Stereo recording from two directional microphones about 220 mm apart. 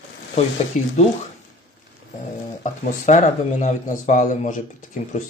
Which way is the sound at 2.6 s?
35° left (ahead or behind).